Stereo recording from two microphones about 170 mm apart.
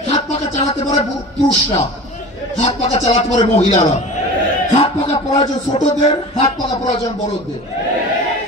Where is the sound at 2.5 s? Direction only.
40° left (ahead or behind).